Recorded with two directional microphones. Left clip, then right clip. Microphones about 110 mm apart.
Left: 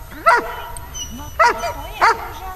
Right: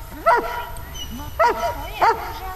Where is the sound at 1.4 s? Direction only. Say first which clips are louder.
Left 3 dB; 40° left (ahead or behind).